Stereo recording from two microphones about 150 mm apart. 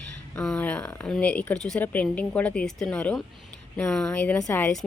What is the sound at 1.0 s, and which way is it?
A woman's voice, 5° left (ahead or behind).